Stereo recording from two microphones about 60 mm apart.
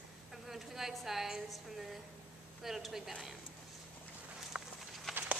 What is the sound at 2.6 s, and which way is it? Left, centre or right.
Speech, centre.